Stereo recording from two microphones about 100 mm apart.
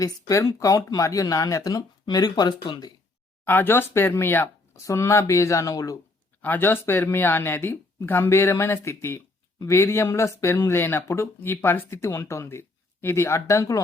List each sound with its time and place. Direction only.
0.0 s speech: 35° left (ahead or behind)
3.4 s speech: 20° left (ahead or behind); by 6.0 s 35° left (ahead or behind)
6.4 s speech: 20° left (ahead or behind)